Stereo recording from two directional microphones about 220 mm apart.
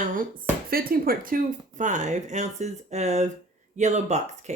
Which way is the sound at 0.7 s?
40° right (ahead or behind).